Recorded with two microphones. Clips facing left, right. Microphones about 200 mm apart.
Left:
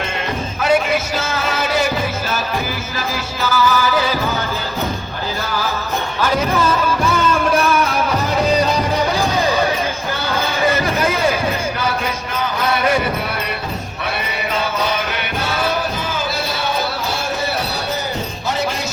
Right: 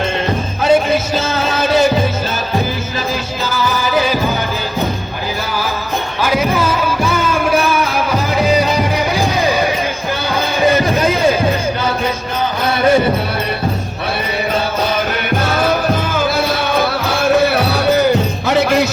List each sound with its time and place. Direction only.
0.6 s music: 25° right (ahead or behind)
3.5 s music: 20° right (ahead or behind)
6.2 s music: 10° right (ahead or behind)
9.1 s music: 10° right (ahead or behind)
10.7 s music: 20° right (ahead or behind)
12.8 s music: 30° right (ahead or behind)
15.4 s music: 45° right (ahead or behind)
16.7 s music: 65° right (ahead or behind)